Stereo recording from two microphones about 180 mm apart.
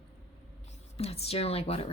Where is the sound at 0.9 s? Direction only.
35° left (ahead or behind).